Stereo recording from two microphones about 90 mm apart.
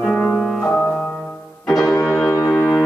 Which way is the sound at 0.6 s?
15° left (ahead or behind).